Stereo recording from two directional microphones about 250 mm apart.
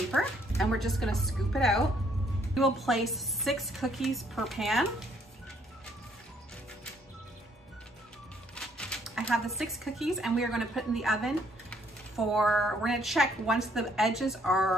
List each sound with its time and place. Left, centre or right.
0.6 s a woman's voice: centre
8.5 s speech: centre